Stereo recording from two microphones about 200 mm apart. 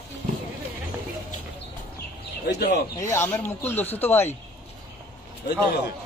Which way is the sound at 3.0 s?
15° left (ahead or behind).